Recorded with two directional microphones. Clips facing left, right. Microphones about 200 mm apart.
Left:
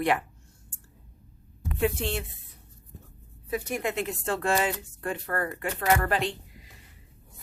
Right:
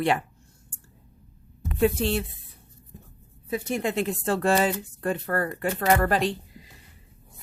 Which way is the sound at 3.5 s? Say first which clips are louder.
Right 3 dB; 25° right (ahead or behind).